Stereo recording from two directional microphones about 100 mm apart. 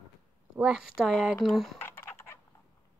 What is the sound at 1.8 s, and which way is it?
Typing, 25° left (ahead or behind).